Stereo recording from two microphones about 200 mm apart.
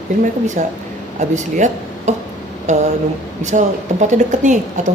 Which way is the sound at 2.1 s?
35° right (ahead or behind).